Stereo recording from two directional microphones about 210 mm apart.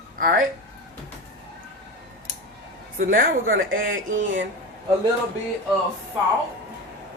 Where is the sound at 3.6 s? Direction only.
65° right (ahead or behind).